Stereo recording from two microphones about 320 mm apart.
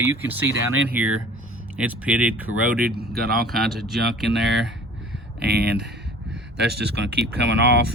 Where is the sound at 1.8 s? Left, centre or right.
Centre.